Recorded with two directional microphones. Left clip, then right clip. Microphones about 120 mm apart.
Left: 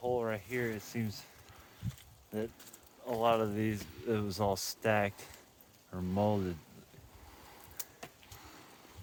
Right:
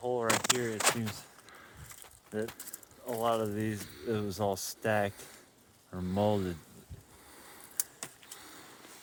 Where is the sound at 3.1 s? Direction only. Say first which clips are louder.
Left 1 dB; 10° left (ahead or behind).